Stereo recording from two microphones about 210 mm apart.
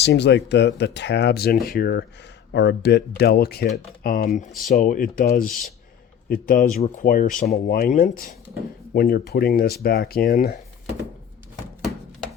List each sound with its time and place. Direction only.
0.0 s a man's voice: 55° left (ahead or behind)